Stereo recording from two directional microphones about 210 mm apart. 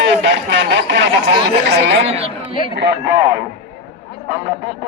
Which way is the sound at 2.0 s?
30° right (ahead or behind).